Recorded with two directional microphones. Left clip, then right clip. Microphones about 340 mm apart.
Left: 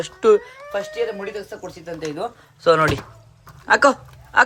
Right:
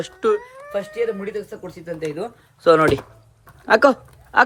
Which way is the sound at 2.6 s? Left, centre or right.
Centre.